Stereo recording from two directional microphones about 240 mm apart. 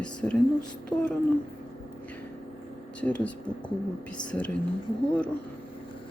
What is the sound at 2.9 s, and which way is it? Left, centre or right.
Speech, centre.